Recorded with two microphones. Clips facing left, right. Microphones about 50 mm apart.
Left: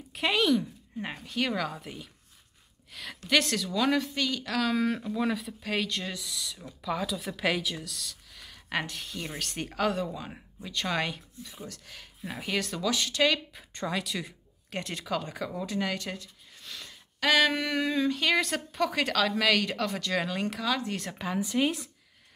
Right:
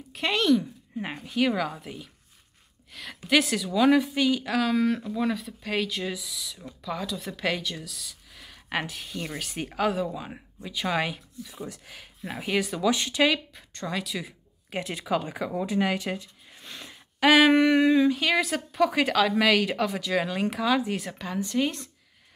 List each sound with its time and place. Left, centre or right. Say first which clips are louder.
0.1 s speech: right 2 dB; centre
0.9 s a woman's voice: right 4 dB; centre
11.5 s a woman's voice: right 5 dB; centre
12.9 s speech: right 2 dB; right
13.8 s speech: right 1 dB; centre; by 18.0 s right
18.0 s a woman's voice: right 3 dB; centre
21.2 s a woman's voice: left 1 dB; centre